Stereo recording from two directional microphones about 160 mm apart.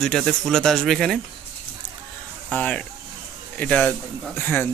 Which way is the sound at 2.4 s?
5° left (ahead or behind).